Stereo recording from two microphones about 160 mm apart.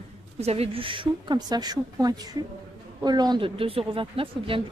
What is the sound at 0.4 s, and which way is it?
Speech, 40° right (ahead or behind).